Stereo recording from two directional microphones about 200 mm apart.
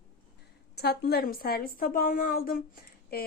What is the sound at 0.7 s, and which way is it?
Speech, 55° left (ahead or behind).